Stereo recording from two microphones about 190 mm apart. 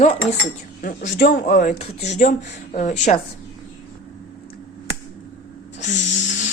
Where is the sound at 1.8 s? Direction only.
35° left (ahead or behind).